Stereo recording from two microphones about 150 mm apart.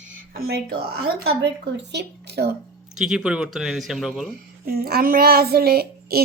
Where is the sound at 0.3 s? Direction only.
90° right.